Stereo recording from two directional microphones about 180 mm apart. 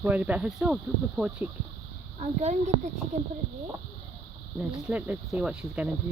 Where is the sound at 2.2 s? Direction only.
40° right (ahead or behind).